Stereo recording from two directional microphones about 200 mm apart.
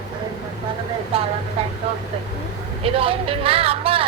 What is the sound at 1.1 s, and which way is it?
Speech, 30° right (ahead or behind).